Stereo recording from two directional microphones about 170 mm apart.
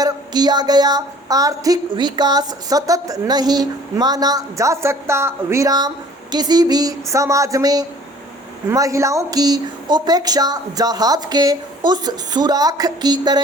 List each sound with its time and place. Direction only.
0.0 s a woman's voice: 25° right (ahead or behind)